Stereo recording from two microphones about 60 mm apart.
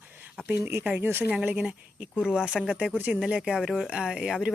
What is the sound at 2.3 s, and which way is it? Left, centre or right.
Speech, centre.